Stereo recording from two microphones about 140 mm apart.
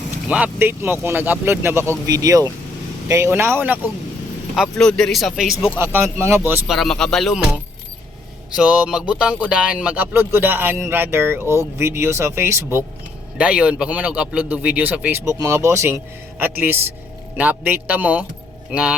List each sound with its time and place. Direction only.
0.3 s speech: 10° right (ahead or behind)
4.5 s speech: centre (ahead or behind)
5.8 s speech: 15° right (ahead or behind)
6.7 s speech: centre (ahead or behind)
8.5 s speech: 10° right (ahead or behind)